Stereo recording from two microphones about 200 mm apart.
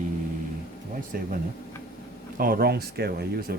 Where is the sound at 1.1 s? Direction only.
50° right (ahead or behind).